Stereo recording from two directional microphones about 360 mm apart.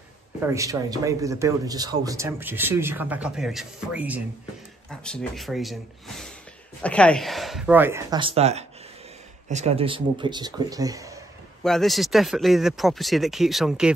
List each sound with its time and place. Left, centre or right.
0.4 s speech: centre